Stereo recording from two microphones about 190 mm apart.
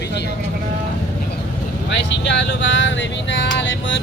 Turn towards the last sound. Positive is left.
turn(degrees=70)  # may be behind; listen again after turning